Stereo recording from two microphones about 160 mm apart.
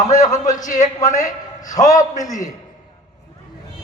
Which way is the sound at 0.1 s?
50° left (ahead or behind).